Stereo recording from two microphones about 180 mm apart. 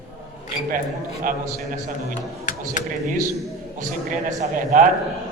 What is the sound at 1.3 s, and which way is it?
Speech, 50° right (ahead or behind).